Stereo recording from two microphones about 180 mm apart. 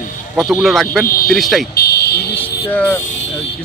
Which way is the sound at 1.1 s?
55° left (ahead or behind).